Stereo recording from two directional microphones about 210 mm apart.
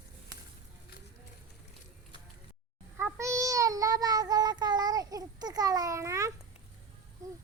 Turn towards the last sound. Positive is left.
turn(degrees=-15)  # may be behind; listen again after turning